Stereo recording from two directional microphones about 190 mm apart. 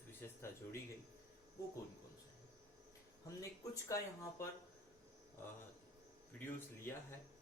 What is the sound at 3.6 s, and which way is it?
Speech, 15° left (ahead or behind).